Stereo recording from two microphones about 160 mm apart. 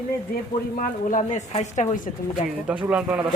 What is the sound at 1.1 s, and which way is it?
Speech, 45° left (ahead or behind).